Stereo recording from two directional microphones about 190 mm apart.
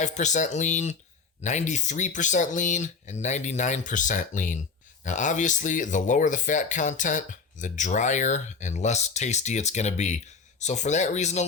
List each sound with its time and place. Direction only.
0.0 s speech: 40° left (ahead or behind)